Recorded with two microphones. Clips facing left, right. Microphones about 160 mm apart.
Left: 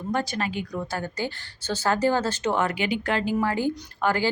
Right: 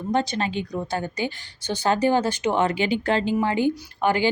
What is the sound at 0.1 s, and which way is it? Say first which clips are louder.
A woman's voice: right 3 dB; 20° right (ahead or behind).